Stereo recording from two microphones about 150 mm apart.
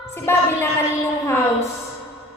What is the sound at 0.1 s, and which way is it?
Speech, 15° left (ahead or behind).